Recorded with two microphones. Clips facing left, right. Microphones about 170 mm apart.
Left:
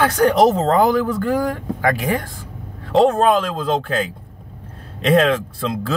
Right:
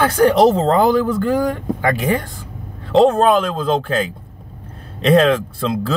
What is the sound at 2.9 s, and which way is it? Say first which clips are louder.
Speech: right 2 dB; 25° right (ahead or behind).